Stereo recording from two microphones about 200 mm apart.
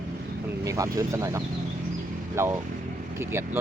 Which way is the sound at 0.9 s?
15° right (ahead or behind).